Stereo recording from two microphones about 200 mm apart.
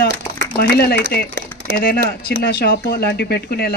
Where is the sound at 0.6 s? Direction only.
50° left (ahead or behind).